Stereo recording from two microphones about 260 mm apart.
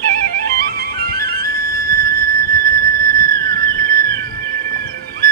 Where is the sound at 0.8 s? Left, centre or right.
Right.